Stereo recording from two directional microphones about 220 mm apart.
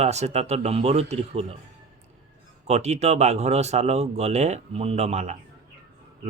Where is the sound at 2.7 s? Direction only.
30° right (ahead or behind).